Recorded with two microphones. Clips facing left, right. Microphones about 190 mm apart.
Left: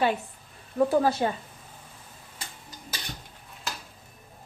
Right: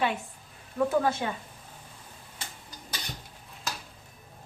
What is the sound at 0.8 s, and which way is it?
Speech, 35° left (ahead or behind).